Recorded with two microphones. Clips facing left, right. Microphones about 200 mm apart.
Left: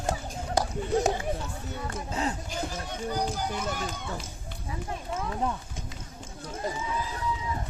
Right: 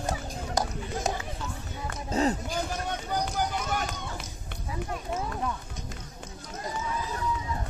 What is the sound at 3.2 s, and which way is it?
Run, 60° right (ahead or behind).